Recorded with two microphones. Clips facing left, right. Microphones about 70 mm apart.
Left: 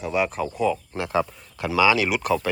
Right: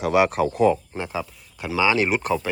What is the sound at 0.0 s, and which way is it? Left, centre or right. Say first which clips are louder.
Speech: right 5 dB; right.